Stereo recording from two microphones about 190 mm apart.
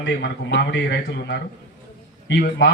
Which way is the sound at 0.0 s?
65° left (ahead or behind).